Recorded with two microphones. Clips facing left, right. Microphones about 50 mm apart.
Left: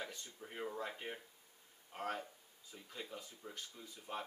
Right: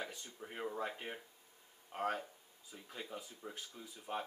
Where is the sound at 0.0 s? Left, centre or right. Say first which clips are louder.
Right 2 dB; centre.